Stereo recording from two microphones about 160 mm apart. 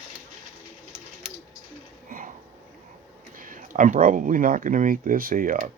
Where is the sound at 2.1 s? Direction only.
60° right (ahead or behind).